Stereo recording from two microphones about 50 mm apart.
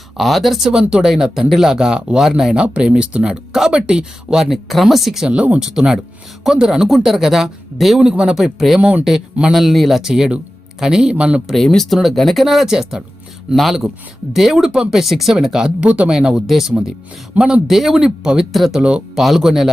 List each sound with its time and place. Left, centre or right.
0.2 s speech: centre
5.3 s speech: right
5.5 s speech: centre
8.0 s speech: centre
10.1 s speech: centre
11.5 s speech: centre
15.8 s speech: right
16.0 s speech: centre
17.7 s speech: centre
18.5 s speech: centre
18.8 s speech: right
19.1 s speech: centre